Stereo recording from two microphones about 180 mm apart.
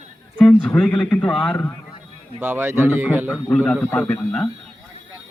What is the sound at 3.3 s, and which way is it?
Speech, 10° left (ahead or behind).